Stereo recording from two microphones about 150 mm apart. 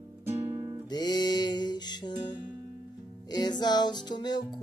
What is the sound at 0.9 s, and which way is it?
Music, 30° left (ahead or behind).